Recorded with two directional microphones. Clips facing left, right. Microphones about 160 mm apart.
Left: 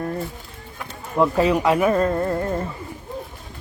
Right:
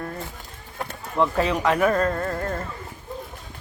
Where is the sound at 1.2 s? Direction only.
10° left (ahead or behind).